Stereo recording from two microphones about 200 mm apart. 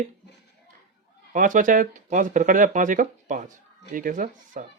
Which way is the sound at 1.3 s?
40° right (ahead or behind).